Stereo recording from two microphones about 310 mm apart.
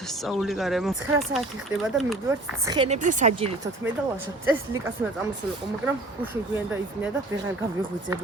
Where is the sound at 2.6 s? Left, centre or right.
Centre.